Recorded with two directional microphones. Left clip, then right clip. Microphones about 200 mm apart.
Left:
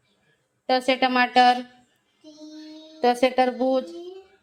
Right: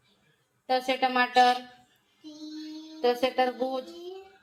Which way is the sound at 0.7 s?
55° left (ahead or behind).